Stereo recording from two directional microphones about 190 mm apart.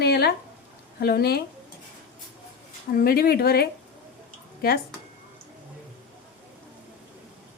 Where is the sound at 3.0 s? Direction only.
55° left (ahead or behind).